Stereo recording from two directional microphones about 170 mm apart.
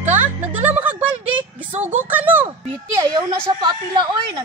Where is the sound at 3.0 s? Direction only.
25° right (ahead or behind).